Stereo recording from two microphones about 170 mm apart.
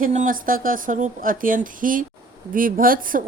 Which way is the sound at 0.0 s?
50° right (ahead or behind).